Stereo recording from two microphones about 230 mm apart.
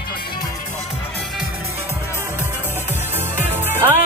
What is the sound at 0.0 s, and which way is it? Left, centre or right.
Music, left.